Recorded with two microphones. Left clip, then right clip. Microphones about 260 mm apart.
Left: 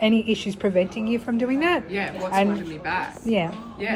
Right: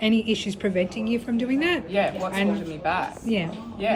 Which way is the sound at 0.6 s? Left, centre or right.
Left.